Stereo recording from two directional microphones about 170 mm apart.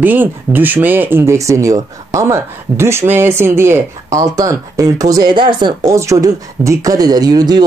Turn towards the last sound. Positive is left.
turn(degrees=-25)  # may be behind; listen again after turning